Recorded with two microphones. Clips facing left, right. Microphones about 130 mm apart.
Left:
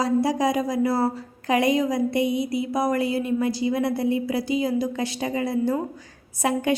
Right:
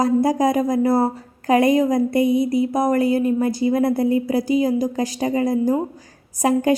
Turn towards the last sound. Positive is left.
turn(degrees=-40)  # may be behind; listen again after turning